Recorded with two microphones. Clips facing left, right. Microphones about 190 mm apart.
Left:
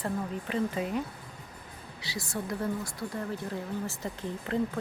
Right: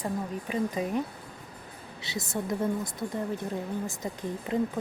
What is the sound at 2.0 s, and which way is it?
A woman's voice, 20° right (ahead or behind).